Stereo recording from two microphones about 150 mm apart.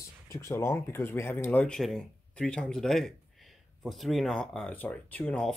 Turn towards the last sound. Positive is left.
turn(degrees=5)  # may be behind; listen again after turning